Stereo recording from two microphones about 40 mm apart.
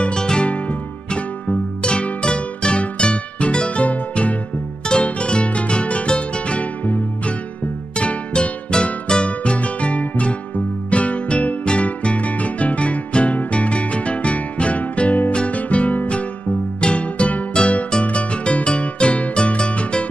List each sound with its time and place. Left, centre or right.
0.0 s music: centre
0.5 s music: left
8.0 s music: left